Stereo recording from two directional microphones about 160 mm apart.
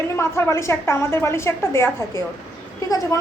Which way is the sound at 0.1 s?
15° left (ahead or behind).